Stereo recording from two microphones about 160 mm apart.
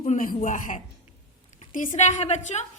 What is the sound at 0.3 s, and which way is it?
A woman's voice, 55° left (ahead or behind).